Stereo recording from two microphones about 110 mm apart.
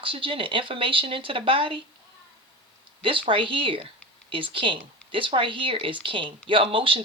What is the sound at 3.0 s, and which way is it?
Speech, 55° right (ahead or behind).